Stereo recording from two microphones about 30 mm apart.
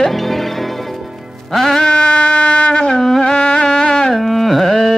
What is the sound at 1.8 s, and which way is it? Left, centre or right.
Wind instrument, left.